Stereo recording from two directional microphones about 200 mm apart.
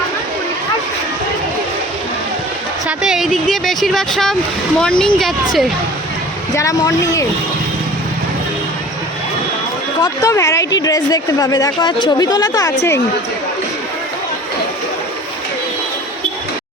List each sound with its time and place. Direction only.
2.8 s speech: 5° right (ahead or behind)
6.5 s speech: 15° left (ahead or behind)
10.0 s speech: 15° left (ahead or behind)